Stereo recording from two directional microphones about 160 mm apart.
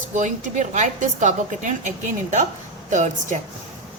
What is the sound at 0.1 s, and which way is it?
A woman's voice, 50° right (ahead or behind).